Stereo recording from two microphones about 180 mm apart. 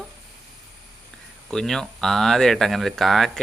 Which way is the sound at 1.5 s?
Centre (ahead or behind).